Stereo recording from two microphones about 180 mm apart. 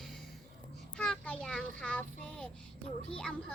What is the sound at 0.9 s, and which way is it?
Child singing, 5° left (ahead or behind).